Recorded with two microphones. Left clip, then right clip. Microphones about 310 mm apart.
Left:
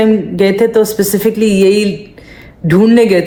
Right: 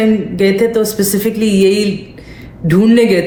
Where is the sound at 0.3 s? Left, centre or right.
Left.